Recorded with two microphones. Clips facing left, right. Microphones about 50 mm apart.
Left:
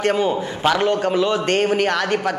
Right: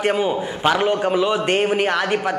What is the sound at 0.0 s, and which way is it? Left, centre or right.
A man's voice, centre.